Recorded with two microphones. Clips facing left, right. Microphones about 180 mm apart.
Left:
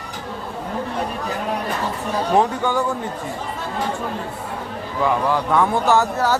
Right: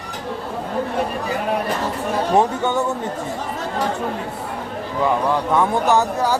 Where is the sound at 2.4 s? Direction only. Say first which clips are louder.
Even; 25° right (ahead or behind).